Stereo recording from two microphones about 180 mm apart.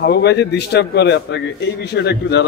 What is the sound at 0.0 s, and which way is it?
A man's voice, 65° left (ahead or behind).